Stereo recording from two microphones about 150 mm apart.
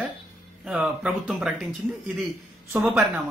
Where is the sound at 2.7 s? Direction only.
10° right (ahead or behind).